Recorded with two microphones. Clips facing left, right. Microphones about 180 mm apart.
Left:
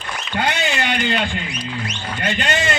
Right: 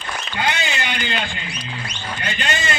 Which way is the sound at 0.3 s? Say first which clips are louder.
Left 3 dB; 60° left (ahead or behind).